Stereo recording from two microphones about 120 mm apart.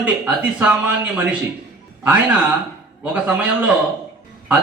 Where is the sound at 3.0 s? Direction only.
15° right (ahead or behind).